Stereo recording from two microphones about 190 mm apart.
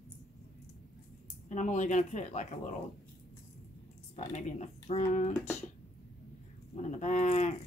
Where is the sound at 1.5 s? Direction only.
40° left (ahead or behind).